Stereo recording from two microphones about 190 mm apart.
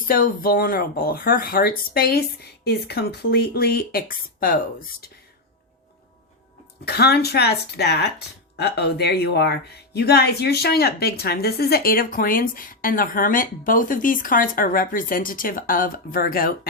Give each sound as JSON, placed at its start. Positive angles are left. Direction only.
{"t": 0.1, "sound": "a woman's voice", "side_deg": 50}
{"t": 6.8, "sound": "a woman's voice", "side_deg": 55}